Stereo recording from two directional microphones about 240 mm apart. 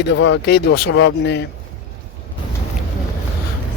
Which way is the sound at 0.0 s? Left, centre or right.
Left.